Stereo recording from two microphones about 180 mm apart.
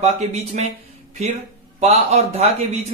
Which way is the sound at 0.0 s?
35° right (ahead or behind).